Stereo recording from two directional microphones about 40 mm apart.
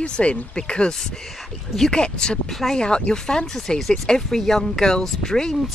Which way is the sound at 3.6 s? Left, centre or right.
Centre.